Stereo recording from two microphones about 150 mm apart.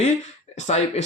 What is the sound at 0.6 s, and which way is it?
Speech, 50° left (ahead or behind).